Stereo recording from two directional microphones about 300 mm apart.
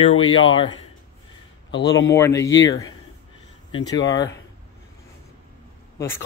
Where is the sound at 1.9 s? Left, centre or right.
Centre.